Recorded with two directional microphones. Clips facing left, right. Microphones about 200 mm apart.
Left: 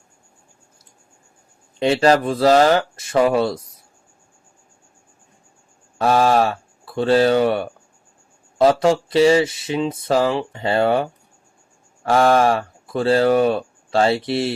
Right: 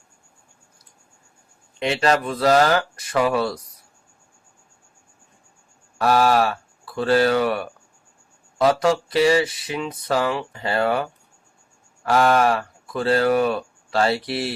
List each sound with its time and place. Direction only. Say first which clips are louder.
1.8 s speech: left 5 dB; 30° left (ahead or behind)
6.0 s speech: left 2 dB; 25° left (ahead or behind)